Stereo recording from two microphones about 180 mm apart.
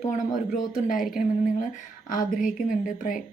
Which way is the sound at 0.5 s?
50° left (ahead or behind).